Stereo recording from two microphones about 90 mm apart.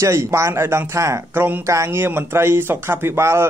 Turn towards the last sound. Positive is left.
turn(degrees=-30)  # may be behind; listen again after turning